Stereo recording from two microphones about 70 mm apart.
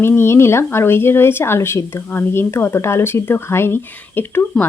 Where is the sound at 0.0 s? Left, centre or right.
Left.